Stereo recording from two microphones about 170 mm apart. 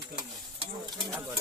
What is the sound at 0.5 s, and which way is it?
Speech, 30° right (ahead or behind).